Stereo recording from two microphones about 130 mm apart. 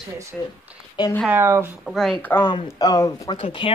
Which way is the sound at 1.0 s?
35° left (ahead or behind).